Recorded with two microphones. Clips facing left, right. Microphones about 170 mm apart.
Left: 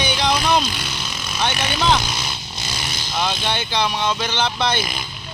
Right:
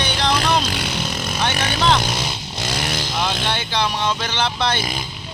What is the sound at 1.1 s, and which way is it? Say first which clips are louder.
Vehicle: right 5 dB; 55° right (ahead or behind).